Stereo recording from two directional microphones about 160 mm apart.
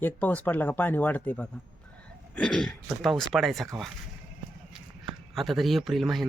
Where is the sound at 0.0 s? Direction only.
10° left (ahead or behind).